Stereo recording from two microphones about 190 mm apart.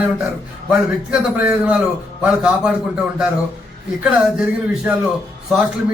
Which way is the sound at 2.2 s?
5° right (ahead or behind).